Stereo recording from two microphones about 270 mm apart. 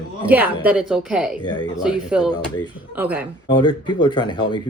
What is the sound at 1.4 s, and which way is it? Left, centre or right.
Speech, centre.